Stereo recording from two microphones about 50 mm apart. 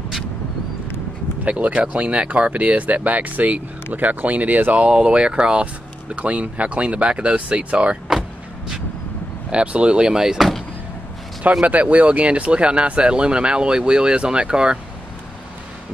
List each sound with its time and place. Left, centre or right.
1.4 s speech: right
4.8 s speech: right
8.1 s vehicle: centre
9.5 s speech: right
11.6 s speech: right